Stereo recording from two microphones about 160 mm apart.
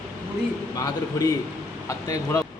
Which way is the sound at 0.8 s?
20° left (ahead or behind).